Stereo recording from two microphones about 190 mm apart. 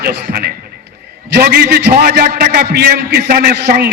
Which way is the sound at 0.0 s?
60° right (ahead or behind).